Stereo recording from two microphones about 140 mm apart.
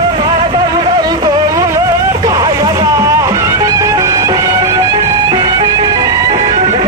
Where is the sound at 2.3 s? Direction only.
30° right (ahead or behind).